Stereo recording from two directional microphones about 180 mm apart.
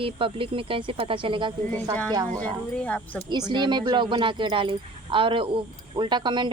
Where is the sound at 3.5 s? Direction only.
25° right (ahead or behind).